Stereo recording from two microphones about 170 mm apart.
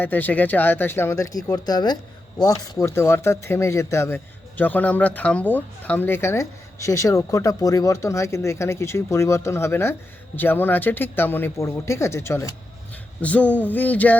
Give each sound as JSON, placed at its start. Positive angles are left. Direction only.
{"t": 0.0, "sound": "a man's voice", "side_deg": 10}